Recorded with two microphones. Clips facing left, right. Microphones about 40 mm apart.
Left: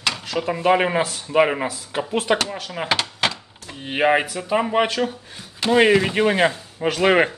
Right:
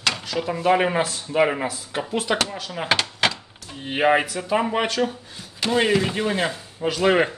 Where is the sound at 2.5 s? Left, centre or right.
Centre.